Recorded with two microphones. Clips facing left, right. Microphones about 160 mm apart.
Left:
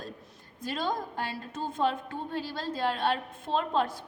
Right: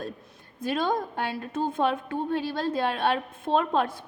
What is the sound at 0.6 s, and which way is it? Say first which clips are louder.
A woman's voice: right 5 dB; 60° right (ahead or behind).